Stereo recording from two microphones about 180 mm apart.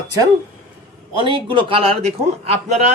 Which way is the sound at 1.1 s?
25° right (ahead or behind).